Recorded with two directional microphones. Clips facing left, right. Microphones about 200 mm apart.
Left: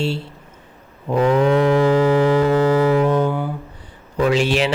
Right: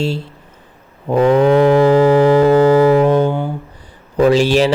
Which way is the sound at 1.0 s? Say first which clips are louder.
Right 4 dB; 30° right (ahead or behind).